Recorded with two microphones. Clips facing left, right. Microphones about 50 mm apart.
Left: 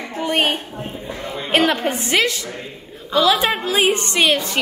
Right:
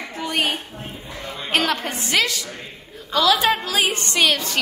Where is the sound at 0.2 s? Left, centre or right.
Left.